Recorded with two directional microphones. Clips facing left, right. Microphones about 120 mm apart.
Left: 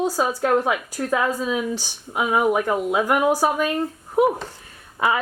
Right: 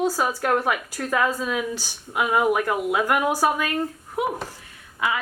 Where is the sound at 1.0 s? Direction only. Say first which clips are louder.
Left 1 dB; 10° left (ahead or behind).